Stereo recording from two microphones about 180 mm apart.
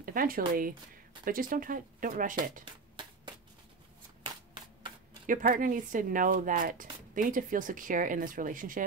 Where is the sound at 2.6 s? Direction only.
25° right (ahead or behind).